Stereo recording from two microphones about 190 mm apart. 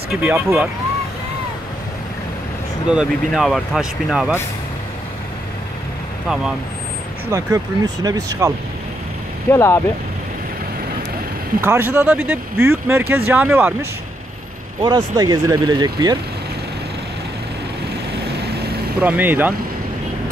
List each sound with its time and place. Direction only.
0.1 s speech: 10° right (ahead or behind)
2.9 s speech: 5° right (ahead or behind)
6.2 s speech: centre (ahead or behind)
7.2 s speech: 15° right (ahead or behind)
9.5 s speech: 15° left (ahead or behind)
11.6 s speech: 10° right (ahead or behind)
14.8 s speech: 25° right (ahead or behind)
18.9 s speech: 10° right (ahead or behind)